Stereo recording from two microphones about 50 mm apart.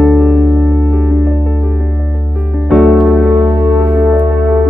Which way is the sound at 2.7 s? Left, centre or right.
Centre.